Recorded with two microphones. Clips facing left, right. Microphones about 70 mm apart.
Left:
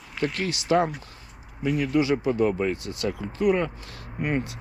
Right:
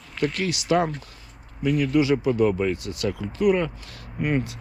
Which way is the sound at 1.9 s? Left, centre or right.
Left.